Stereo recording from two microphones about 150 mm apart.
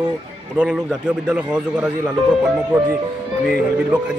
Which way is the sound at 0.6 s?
5° right (ahead or behind).